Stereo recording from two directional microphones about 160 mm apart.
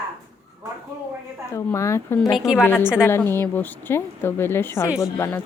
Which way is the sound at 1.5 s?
20° left (ahead or behind).